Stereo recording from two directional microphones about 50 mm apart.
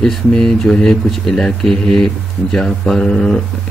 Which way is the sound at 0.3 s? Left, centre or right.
Centre.